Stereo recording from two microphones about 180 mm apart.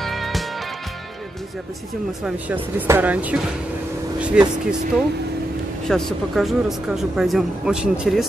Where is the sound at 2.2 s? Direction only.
10° right (ahead or behind).